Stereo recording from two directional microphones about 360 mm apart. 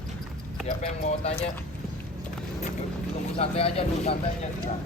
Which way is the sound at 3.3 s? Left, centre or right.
Centre.